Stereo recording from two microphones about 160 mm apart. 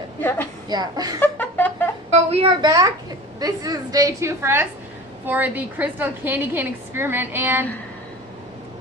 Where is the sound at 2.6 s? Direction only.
25° right (ahead or behind).